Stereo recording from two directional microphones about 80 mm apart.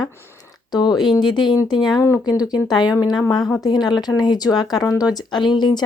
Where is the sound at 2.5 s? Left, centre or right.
Left.